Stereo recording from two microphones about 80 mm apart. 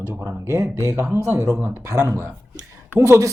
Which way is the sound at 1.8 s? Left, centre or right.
Right.